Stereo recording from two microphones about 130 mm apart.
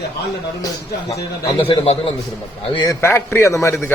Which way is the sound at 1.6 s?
45° left (ahead or behind).